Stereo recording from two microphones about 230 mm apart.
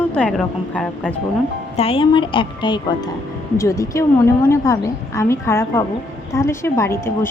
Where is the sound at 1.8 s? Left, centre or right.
Left.